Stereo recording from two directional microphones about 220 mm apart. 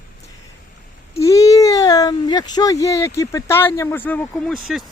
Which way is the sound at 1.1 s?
15° left (ahead or behind).